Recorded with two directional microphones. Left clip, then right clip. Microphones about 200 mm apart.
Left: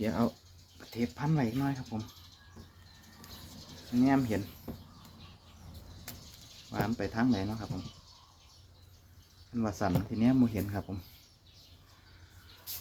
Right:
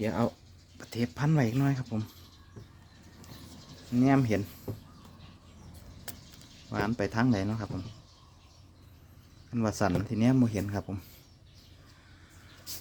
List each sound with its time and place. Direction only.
0.0 s speech: 25° right (ahead or behind)
0.8 s speech: 45° right (ahead or behind)
4.0 s speech: 60° right (ahead or behind)
6.7 s speech: 55° right (ahead or behind)
9.6 s speech: 50° right (ahead or behind)